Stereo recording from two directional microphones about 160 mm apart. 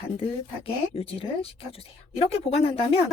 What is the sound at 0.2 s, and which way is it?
Speech, 35° left (ahead or behind).